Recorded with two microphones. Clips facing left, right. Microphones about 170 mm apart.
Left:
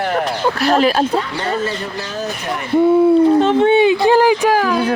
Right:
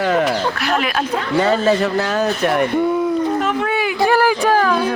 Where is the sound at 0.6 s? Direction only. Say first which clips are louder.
Left 9 dB; 35° left (ahead or behind).